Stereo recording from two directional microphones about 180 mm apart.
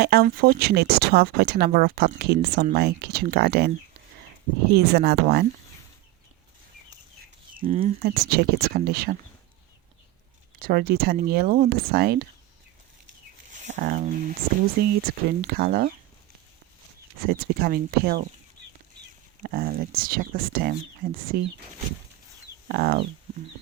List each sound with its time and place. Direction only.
0.0 s speech: 60° right (ahead or behind)
4.7 s speech: 60° right (ahead or behind)
7.7 s speech: 40° right (ahead or behind)
8.0 s speech: 60° right (ahead or behind)
10.6 s speech: 55° right (ahead or behind)
13.6 s speech: 45° right (ahead or behind)
17.2 s speech: 55° right (ahead or behind)
19.4 s speech: 55° right (ahead or behind)
22.7 s speech: 55° right (ahead or behind)